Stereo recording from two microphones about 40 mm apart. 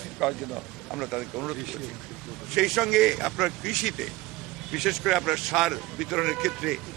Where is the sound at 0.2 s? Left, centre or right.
Centre.